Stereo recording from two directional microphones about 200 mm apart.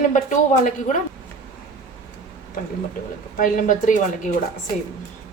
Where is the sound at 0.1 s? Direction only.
40° left (ahead or behind).